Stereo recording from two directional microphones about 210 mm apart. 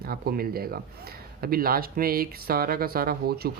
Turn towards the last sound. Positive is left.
turn(degrees=-45)  # may be behind; listen again after turning